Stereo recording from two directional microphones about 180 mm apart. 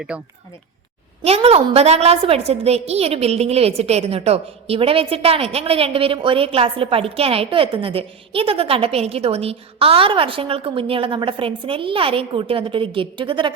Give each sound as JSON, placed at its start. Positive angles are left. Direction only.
{"t": 0.1, "sound": "speech", "side_deg": -5}
{"t": 1.2, "sound": "a woman's voice", "side_deg": -35}